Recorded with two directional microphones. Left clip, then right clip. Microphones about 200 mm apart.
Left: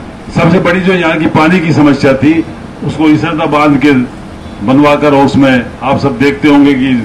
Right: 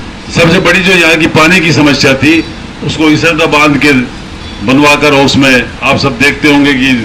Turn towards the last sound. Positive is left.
turn(degrees=55)  # may be behind; listen again after turning